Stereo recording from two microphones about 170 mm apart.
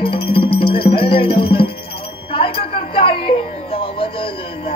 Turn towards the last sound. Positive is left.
turn(degrees=30)  # may be behind; listen again after turning